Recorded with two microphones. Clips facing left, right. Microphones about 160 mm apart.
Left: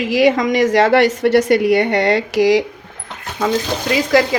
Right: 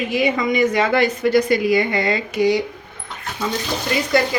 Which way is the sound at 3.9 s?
90° left.